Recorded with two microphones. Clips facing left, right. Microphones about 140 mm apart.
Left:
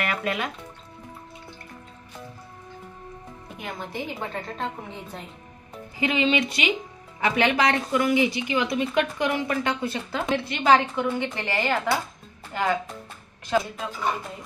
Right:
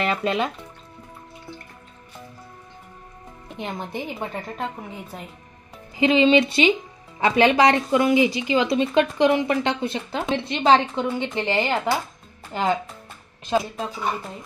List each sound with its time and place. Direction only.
0.0 s speech: 25° right (ahead or behind)
3.5 s speech: 25° right (ahead or behind)
4.6 s a woman's voice: 5° right (ahead or behind)
5.9 s speech: 25° right (ahead or behind)
8.3 s speech: 90° right
8.5 s speech: 25° right (ahead or behind)